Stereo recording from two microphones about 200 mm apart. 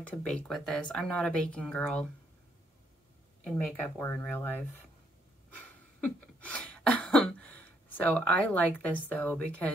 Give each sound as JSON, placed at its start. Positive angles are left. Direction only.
{"t": 0.0, "sound": "speech", "side_deg": 5}
{"t": 3.4, "sound": "speech", "side_deg": 10}
{"t": 5.5, "sound": "cough", "side_deg": 5}